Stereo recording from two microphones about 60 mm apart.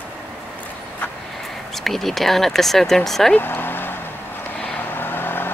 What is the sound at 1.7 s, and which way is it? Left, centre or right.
Speech, centre.